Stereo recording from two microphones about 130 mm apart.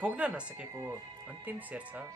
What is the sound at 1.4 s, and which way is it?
Speech, 15° right (ahead or behind).